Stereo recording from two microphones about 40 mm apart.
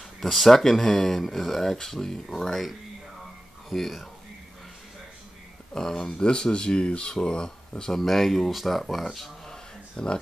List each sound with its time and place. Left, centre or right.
0.2 s speech: centre
3.7 s speech: centre
5.7 s speech: centre
9.9 s speech: left